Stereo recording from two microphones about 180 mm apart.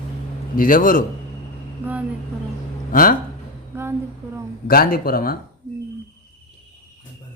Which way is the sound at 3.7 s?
15° right (ahead or behind).